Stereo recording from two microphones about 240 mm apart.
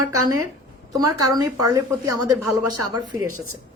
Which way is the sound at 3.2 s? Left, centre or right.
Right.